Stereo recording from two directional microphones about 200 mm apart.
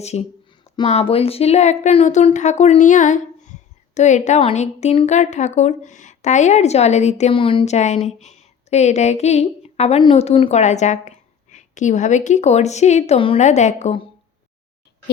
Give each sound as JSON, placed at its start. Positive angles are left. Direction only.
{"t": 0.0, "sound": "a woman's voice", "side_deg": 30}